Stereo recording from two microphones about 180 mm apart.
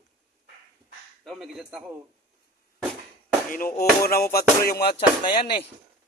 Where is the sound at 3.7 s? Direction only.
55° left (ahead or behind).